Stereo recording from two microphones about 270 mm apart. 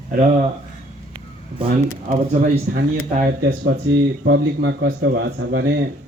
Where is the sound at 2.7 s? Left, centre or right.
Right.